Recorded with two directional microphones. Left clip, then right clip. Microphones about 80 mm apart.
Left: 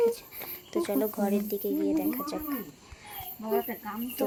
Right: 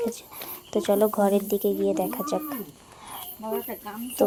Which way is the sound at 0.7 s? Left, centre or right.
Right.